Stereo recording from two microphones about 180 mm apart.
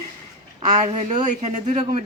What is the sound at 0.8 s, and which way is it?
Speech, 35° right (ahead or behind).